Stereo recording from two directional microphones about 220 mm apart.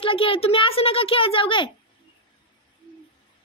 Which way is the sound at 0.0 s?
25° left (ahead or behind).